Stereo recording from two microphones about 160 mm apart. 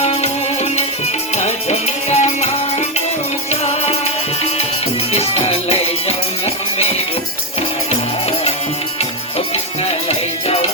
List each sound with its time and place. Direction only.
0.0 s music: 40° left (ahead or behind)
1.4 s music: 45° left (ahead or behind)
3.5 s music: 45° left (ahead or behind)
5.1 s music: 40° left (ahead or behind)
10.1 s music: 40° left (ahead or behind)